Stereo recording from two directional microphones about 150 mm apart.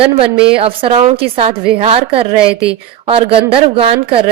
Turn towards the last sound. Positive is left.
turn(degrees=-40)  # may be behind; listen again after turning